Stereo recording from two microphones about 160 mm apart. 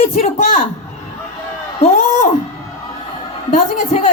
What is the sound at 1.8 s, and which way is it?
Speech, 50° left (ahead or behind).